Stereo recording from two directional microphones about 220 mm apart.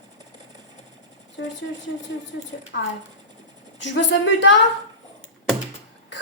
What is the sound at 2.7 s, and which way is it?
A woman's voice, 50° left (ahead or behind).